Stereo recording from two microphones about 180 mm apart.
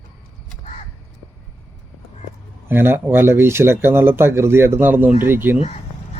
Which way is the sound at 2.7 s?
10° right (ahead or behind).